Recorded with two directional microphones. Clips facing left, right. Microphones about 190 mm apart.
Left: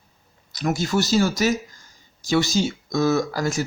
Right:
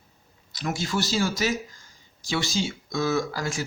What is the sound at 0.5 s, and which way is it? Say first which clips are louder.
Speech: left 6 dB; 45° left (ahead or behind).